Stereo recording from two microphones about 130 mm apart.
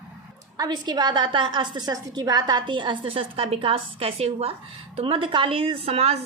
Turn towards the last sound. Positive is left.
turn(degrees=-50)  # may be behind; listen again after turning